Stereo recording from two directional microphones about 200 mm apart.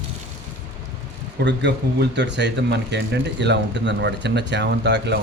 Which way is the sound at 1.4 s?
60° right (ahead or behind).